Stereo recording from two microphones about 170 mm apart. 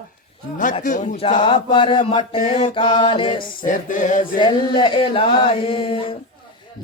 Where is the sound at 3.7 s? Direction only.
50° left (ahead or behind).